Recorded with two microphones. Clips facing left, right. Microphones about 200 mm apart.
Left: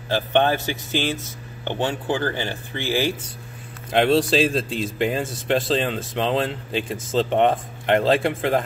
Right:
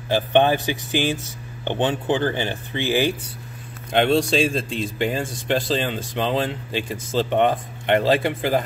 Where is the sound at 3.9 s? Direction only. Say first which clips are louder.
Left 1 dB; centre (ahead or behind).